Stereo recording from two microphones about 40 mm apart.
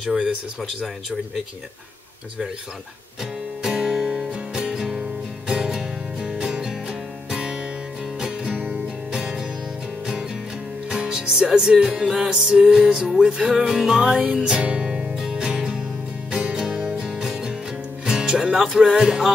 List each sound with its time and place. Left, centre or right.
0.0 s music: centre
3.6 s music: centre
8.6 s music: centre
11.0 s music: centre
14.0 s music: right